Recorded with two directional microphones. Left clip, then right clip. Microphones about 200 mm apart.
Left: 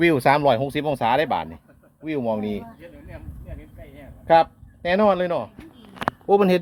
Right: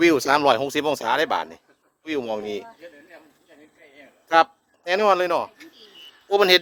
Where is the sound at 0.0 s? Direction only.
30° right (ahead or behind).